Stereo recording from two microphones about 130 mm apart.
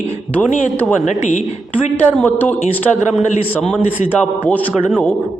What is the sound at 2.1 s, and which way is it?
Speech, 15° left (ahead or behind).